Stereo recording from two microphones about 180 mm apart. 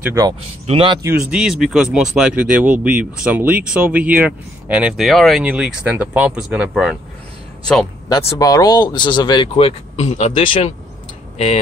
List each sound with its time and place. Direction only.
0.0 s speech: 15° right (ahead or behind)
0.7 s speech: 30° right (ahead or behind)
1.0 s speech: 5° right (ahead or behind)
8.1 s speech: 15° left (ahead or behind)